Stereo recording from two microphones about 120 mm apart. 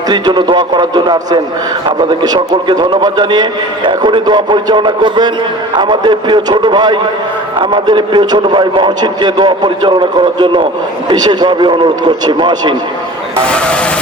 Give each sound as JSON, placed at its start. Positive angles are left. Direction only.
{"t": 0.1, "sound": "a man's voice", "side_deg": -40}
{"t": 13.4, "sound": "speech", "side_deg": 10}